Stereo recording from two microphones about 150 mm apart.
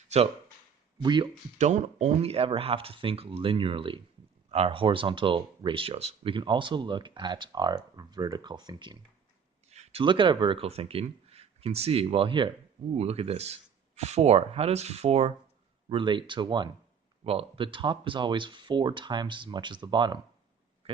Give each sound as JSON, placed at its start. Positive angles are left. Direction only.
{"t": 0.1, "sound": "speech", "side_deg": -50}
{"t": 0.9, "sound": "speech", "side_deg": -30}
{"t": 1.5, "sound": "speech", "side_deg": -50}
{"t": 9.6, "sound": "speech", "side_deg": -45}